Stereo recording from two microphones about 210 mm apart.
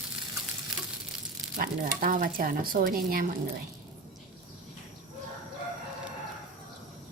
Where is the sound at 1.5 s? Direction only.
45° right (ahead or behind).